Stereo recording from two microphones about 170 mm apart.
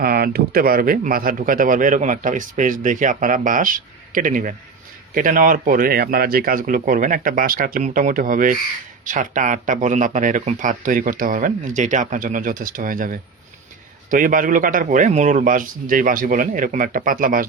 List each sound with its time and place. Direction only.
0.0 s speech: 60° right (ahead or behind)